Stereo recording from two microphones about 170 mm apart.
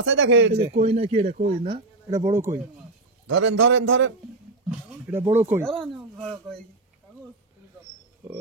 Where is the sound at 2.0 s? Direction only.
20° right (ahead or behind).